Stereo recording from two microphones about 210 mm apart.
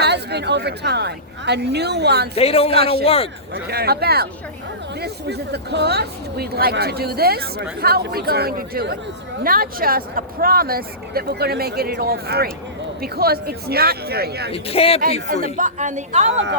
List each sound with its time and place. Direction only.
0.0 s speech: 50° right (ahead or behind)
2.3 s a man's voice: 30° left (ahead or behind)
3.5 s speech: 50° right (ahead or behind)
14.5 s a man's voice: 30° left (ahead or behind)
15.5 s speech: 35° right (ahead or behind)